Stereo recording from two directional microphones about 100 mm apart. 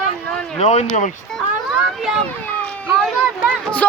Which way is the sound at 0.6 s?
90° left.